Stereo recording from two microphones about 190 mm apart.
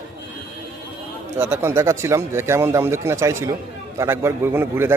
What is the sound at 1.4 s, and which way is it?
Speech, 10° right (ahead or behind).